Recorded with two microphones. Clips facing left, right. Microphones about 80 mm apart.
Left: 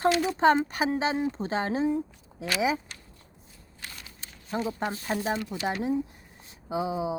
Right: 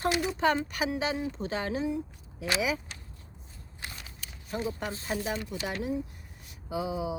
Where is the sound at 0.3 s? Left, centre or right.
Left.